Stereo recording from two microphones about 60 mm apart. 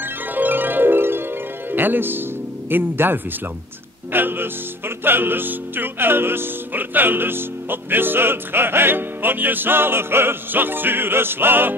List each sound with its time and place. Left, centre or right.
0.0 s music: right
1.7 s speech: right
2.7 s music: right